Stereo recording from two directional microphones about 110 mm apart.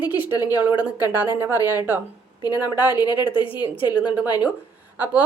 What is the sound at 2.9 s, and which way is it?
A woman's voice, 40° left (ahead or behind).